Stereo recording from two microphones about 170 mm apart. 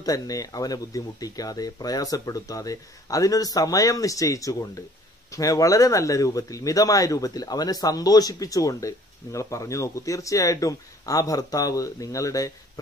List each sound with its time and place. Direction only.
0.0 s speech: 20° left (ahead or behind)